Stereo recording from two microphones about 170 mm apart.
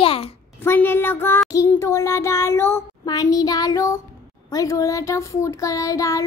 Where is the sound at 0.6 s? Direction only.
15° left (ahead or behind).